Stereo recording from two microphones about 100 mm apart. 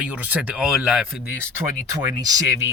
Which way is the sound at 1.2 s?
20° right (ahead or behind).